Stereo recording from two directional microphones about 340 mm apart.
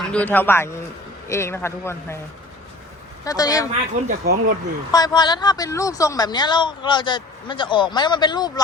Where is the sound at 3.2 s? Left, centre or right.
Centre.